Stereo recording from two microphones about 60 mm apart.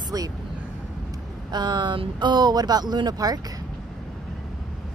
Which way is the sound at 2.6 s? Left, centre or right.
Right.